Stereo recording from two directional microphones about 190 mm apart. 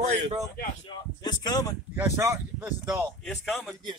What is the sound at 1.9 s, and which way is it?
Speech, 15° right (ahead or behind).